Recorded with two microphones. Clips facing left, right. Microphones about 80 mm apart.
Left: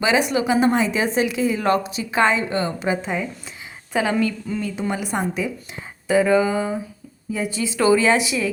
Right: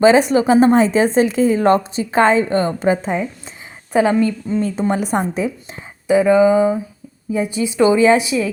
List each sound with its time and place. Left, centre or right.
0.0 s a woman's voice: right
4.1 s a woman's voice: right
4.8 s a woman's voice: right
6.1 s a woman's voice: right